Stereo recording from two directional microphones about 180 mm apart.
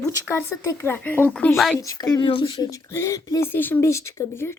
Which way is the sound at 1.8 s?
20° left (ahead or behind).